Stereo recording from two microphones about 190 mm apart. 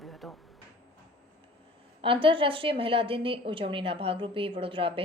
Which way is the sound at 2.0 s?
30° right (ahead or behind).